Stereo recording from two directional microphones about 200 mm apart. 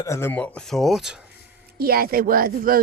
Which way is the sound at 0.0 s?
15° left (ahead or behind).